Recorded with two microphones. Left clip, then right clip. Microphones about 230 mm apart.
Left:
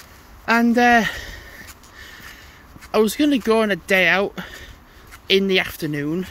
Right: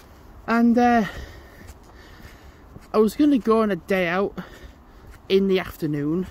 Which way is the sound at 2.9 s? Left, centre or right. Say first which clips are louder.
Left 1 dB; centre.